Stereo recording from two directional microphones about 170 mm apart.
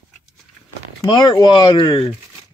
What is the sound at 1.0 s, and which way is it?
Speech, 25° left (ahead or behind).